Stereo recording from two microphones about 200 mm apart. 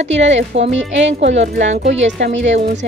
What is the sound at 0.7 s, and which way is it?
Speech, 65° right (ahead or behind).